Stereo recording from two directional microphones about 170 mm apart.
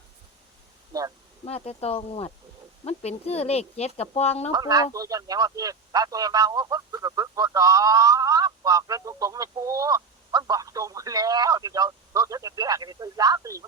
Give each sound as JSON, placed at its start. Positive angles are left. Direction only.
{"t": 0.9, "sound": "a sound", "side_deg": -20}
{"t": 1.5, "sound": "speech", "side_deg": 35}
{"t": 4.5, "sound": "speech", "side_deg": -20}